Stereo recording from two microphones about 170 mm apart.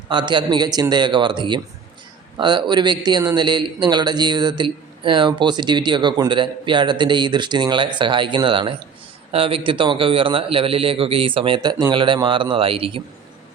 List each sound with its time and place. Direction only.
0.1 s a man's voice: 25° right (ahead or behind)